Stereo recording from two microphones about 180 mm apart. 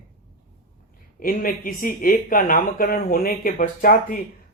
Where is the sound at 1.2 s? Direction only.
50° left (ahead or behind).